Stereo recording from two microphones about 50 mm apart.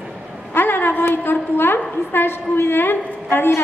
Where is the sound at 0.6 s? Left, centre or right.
Left.